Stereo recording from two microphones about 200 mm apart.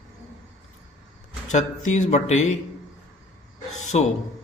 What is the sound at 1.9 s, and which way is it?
Speech, 35° left (ahead or behind).